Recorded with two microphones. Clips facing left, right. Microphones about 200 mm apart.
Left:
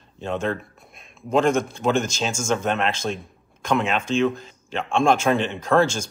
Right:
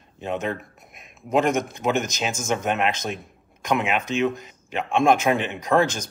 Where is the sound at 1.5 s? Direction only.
30° left (ahead or behind).